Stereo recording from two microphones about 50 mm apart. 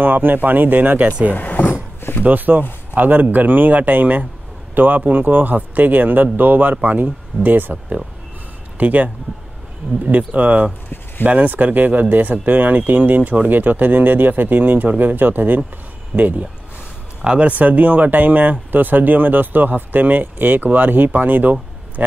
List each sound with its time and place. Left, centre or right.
0.0 s speech: right
1.3 s vehicle: left
2.0 s a sound: left
2.2 s speech: right
17.2 s speech: centre
17.5 s speech: right